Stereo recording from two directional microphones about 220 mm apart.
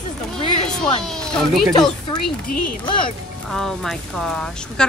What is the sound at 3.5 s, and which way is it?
Speech, centre (ahead or behind).